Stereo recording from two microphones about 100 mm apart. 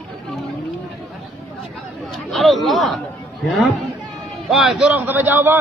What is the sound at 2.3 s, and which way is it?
Speech, centre (ahead or behind).